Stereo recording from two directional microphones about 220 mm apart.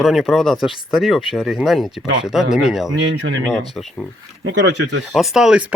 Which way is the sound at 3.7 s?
Centre (ahead or behind).